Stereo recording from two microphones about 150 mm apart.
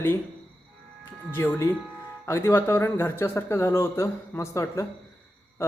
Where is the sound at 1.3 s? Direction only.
15° left (ahead or behind).